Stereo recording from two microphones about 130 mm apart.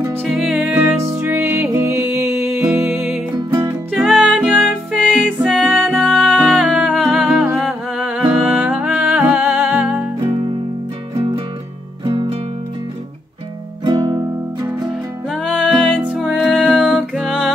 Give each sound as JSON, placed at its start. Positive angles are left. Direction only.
{"t": 0.0, "sound": "music", "side_deg": -15}
{"t": 0.3, "sound": "music", "side_deg": -5}
{"t": 3.9, "sound": "music", "side_deg": -5}
{"t": 12.0, "sound": "music", "side_deg": -40}
{"t": 13.8, "sound": "music", "side_deg": -30}
{"t": 14.9, "sound": "music", "side_deg": 5}
{"t": 16.0, "sound": "music", "side_deg": -10}
{"t": 16.3, "sound": "music", "side_deg": 5}